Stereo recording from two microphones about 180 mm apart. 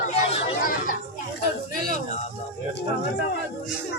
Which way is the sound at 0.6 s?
50° left (ahead or behind).